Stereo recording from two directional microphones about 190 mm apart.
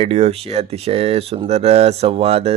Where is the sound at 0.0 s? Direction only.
30° right (ahead or behind).